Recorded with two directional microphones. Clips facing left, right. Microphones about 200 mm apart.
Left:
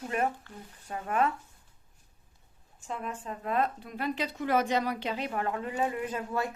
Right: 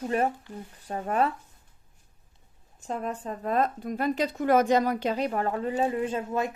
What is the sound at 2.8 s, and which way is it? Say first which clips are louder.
Speech: right 5 dB; 40° right (ahead or behind).